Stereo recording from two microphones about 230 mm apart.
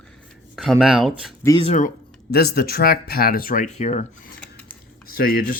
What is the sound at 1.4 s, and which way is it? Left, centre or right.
Speech, centre.